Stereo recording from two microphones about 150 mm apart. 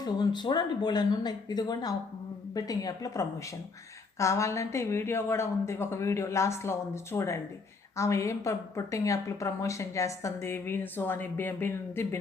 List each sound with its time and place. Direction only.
0.0 s a woman's voice: 30° left (ahead or behind)